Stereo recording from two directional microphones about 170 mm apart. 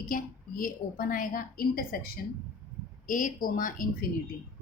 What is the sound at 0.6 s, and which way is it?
A woman's voice, 55° left (ahead or behind).